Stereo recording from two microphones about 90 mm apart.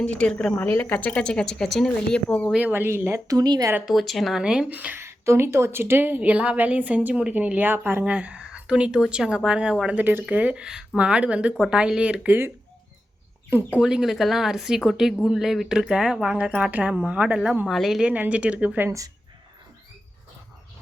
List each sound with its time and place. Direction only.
0.0 s speech: 10° left (ahead or behind)
0.5 s speech: 25° left (ahead or behind)
2.6 s speech: 20° right (ahead or behind)
3.2 s speech: 45° right (ahead or behind)
3.8 s speech: centre (ahead or behind)
4.7 s speech: 15° right (ahead or behind)
4.9 s speech: 30° right (ahead or behind)
13.5 s speech: 25° right (ahead or behind)
13.8 s speech: 5° right (ahead or behind)
18.1 s speech: 15° right (ahead or behind)
18.9 s a woman's voice: 40° right (ahead or behind)